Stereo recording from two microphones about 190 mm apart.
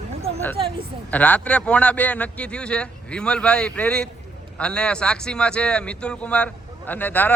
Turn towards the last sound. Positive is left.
turn(degrees=10)  # may be behind; listen again after turning